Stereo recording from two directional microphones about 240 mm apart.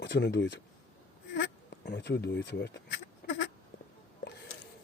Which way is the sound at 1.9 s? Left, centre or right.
Left.